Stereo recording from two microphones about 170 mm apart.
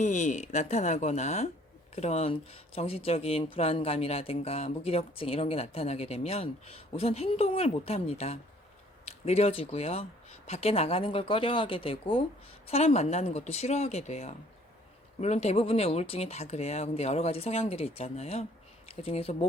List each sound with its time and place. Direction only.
0.0 s speech: 45° left (ahead or behind)